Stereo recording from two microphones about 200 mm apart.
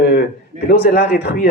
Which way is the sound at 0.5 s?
35° right (ahead or behind).